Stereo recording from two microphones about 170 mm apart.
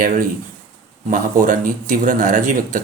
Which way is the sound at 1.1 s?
50° right (ahead or behind).